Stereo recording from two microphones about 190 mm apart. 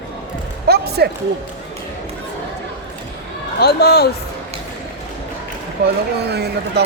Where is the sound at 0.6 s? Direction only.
55° right (ahead or behind).